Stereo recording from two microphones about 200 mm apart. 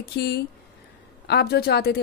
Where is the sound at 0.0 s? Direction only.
55° left (ahead or behind).